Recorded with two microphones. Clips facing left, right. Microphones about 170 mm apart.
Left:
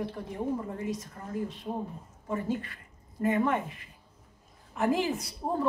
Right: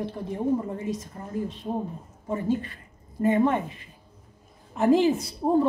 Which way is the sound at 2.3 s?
25° right (ahead or behind).